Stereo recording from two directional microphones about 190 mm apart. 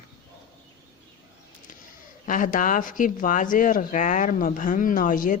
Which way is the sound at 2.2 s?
45° left (ahead or behind).